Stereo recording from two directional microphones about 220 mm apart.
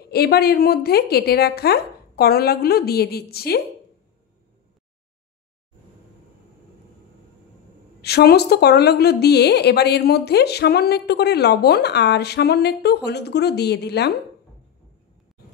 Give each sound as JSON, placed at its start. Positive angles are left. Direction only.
{"t": 0.1, "sound": "a woman's voice", "side_deg": 45}
{"t": 8.0, "sound": "a woman's voice", "side_deg": 45}